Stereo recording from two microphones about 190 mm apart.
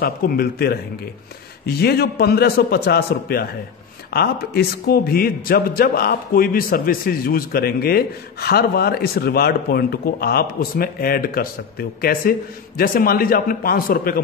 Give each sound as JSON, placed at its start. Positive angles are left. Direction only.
{"t": 0.0, "sound": "a man's voice", "side_deg": 55}